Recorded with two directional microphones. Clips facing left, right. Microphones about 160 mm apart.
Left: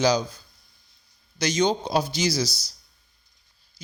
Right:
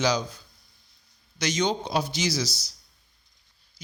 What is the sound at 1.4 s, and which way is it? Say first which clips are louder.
Speech: left 3 dB; 35° left (ahead or behind).